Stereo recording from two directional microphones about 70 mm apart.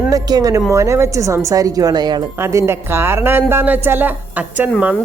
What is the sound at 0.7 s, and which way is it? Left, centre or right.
Speech, right.